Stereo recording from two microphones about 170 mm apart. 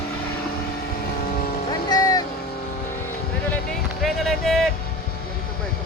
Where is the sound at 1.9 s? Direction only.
20° left (ahead or behind).